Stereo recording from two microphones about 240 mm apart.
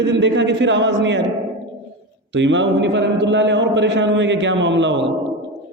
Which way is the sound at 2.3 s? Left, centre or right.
Right.